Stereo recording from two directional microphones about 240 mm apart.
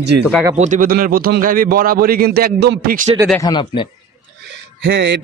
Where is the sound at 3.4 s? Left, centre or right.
Centre.